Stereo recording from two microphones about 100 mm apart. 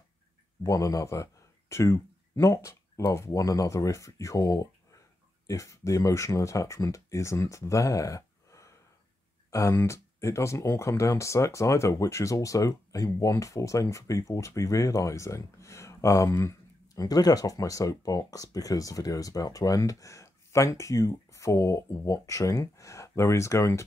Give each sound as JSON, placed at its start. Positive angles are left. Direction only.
{"t": 0.7, "sound": "speech", "side_deg": 35}